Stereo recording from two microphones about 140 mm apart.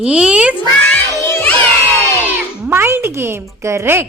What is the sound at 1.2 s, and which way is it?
Music, 20° left (ahead or behind).